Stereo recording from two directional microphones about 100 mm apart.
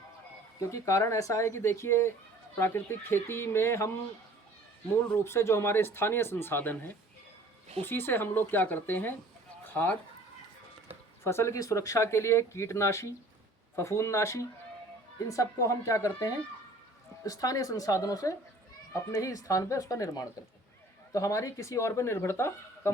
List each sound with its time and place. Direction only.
0.6 s speech: 30° left (ahead or behind)
5.1 s speech: 25° left (ahead or behind)
11.2 s speech: 25° left (ahead or behind)